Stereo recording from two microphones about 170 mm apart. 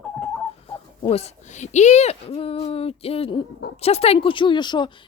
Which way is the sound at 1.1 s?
45° left (ahead or behind).